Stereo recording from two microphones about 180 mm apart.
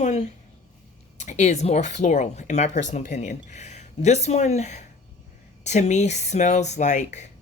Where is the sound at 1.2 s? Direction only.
40° left (ahead or behind).